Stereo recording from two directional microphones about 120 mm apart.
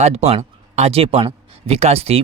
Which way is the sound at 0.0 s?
65° right (ahead or behind).